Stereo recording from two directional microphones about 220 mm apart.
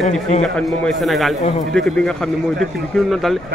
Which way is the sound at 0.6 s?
Centre (ahead or behind).